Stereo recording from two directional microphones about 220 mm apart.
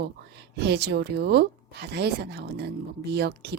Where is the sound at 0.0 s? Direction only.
50° right (ahead or behind).